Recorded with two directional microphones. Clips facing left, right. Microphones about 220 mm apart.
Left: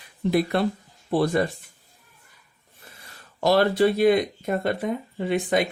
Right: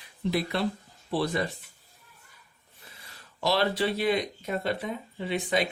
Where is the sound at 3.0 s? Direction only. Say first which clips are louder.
Left 6 dB; 50° left (ahead or behind).